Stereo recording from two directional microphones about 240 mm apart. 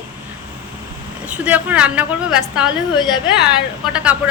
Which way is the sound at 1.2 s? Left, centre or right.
Centre.